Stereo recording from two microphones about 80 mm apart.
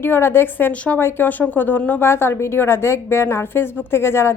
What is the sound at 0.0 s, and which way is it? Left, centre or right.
A woman's voice, left.